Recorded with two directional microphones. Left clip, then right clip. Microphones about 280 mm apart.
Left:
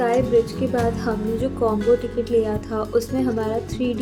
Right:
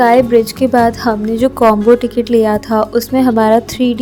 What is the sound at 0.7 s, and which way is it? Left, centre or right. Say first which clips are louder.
A woman's voice: right 11 dB; right.